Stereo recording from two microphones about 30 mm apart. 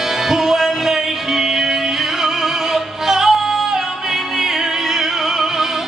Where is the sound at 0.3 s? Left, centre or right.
Centre.